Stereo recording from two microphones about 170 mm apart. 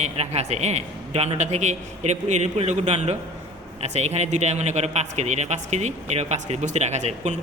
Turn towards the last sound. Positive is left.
turn(degrees=-45)  # may be behind; listen again after turning